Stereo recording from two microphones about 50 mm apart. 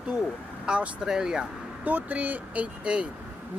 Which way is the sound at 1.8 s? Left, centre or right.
Right.